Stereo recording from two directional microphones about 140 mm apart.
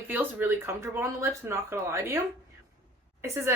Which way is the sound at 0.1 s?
15° right (ahead or behind).